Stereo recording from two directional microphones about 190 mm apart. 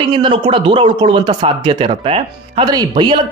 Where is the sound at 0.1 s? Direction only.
25° right (ahead or behind).